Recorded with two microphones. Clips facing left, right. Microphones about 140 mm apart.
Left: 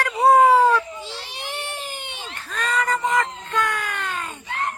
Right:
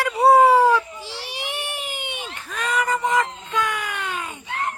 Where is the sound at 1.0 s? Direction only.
10° right (ahead or behind).